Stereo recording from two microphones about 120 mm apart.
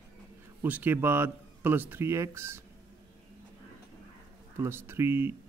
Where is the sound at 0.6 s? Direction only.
15° right (ahead or behind).